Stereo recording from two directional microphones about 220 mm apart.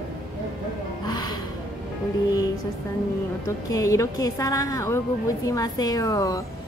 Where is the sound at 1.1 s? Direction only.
15° left (ahead or behind).